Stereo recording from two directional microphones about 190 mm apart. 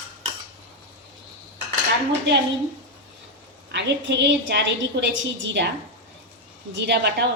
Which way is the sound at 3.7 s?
65° right (ahead or behind).